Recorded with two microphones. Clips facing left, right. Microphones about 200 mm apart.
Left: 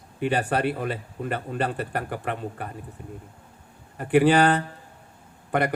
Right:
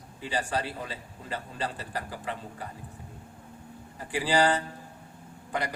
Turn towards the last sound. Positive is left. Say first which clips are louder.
# left 8 dB
turn(degrees=60)  # may be behind; listen again after turning